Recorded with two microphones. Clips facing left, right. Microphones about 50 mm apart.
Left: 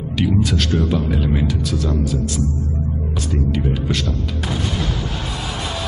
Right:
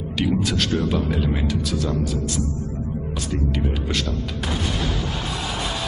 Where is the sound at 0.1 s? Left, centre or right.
Centre.